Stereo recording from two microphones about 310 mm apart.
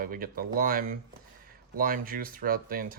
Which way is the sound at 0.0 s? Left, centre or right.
Right.